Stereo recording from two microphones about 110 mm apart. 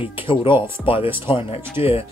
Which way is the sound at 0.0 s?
55° left (ahead or behind).